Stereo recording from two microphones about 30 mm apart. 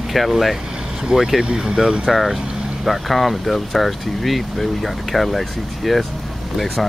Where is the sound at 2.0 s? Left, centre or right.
Centre.